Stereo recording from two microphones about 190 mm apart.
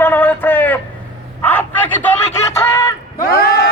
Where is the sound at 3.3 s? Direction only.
55° left (ahead or behind).